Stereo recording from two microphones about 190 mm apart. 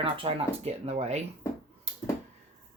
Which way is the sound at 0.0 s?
30° right (ahead or behind).